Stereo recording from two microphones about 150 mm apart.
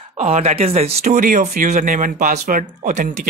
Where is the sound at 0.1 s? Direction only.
45° right (ahead or behind).